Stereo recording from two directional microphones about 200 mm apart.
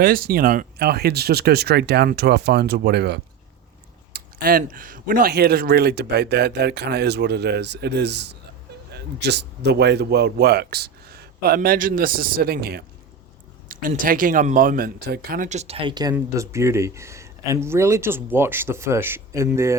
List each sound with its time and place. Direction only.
0.0 s speech: 50° right (ahead or behind); by 19.7 s 15° right (ahead or behind)